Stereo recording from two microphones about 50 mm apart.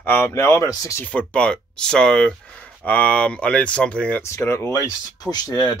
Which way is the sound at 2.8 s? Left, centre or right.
Left.